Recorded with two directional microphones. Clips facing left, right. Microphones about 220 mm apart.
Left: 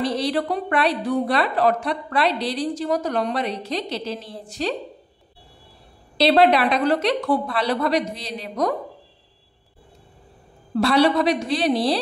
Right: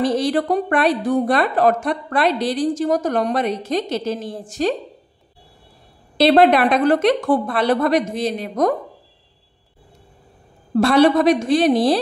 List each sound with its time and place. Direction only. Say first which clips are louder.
0.0 s a woman's voice: right 4 dB; 45° right (ahead or behind)
6.1 s a woman's voice: right 3 dB; 50° right (ahead or behind)
10.7 s a woman's voice: right 4 dB; 50° right (ahead or behind)